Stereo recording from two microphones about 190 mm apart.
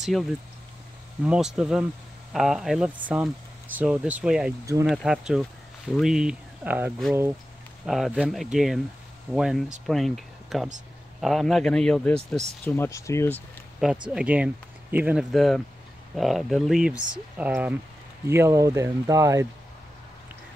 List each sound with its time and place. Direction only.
0.0 s speech: centre (ahead or behind)
13.8 s speech: centre (ahead or behind)